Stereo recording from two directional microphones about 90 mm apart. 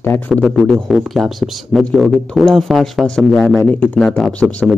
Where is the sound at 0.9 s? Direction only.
Centre (ahead or behind).